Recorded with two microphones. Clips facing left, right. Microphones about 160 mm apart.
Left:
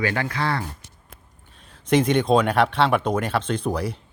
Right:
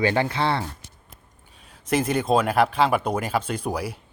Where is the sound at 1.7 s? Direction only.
5° right (ahead or behind).